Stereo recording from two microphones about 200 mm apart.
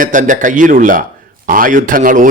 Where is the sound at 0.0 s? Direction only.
40° right (ahead or behind).